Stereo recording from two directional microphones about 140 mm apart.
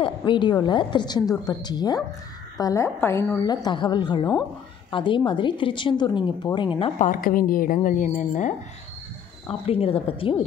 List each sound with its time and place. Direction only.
0.0 s a woman's voice: 35° left (ahead or behind)
7.0 s a woman's voice: 80° left; by 8.5 s 60° left (ahead or behind)
9.5 s a woman's voice: 45° left (ahead or behind)